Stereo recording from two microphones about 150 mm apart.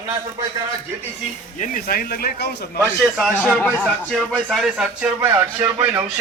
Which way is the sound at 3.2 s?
Centre (ahead or behind).